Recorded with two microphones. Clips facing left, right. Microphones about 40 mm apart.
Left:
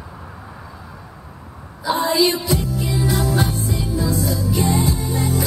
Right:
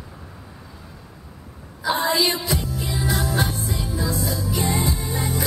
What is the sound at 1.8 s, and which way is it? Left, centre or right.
Music, centre.